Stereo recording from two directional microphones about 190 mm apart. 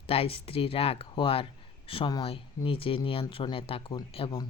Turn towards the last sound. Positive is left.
turn(degrees=30)  # may be behind; listen again after turning